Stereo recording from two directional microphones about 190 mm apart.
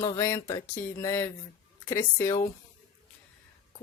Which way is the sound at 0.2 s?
15° left (ahead or behind).